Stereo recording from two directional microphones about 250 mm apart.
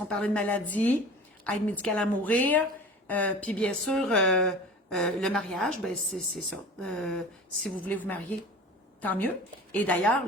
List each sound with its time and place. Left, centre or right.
0.1 s a woman's voice: centre